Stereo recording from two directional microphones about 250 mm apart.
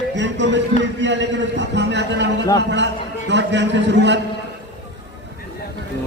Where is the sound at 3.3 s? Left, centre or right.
Right.